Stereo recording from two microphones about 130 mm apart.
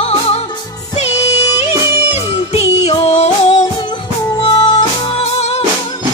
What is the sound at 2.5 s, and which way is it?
Music, 55° left (ahead or behind).